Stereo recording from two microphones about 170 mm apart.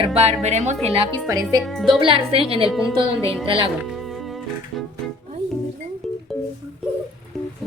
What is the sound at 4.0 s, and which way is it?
Music, centre (ahead or behind).